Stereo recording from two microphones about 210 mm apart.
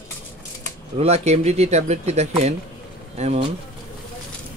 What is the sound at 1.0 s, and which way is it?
Speech, 30° right (ahead or behind).